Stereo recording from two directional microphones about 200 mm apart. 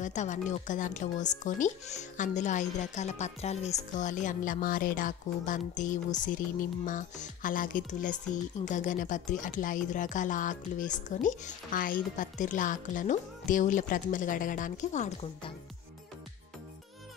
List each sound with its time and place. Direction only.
0.0 s speech: 40° left (ahead or behind)